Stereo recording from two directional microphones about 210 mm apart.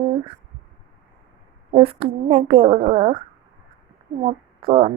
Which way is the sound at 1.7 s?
25° right (ahead or behind).